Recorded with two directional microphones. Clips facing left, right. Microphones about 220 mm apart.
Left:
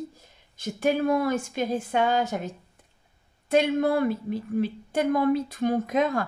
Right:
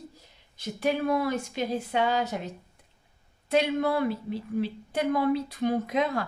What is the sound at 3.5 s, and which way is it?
A woman's voice, 50° left (ahead or behind).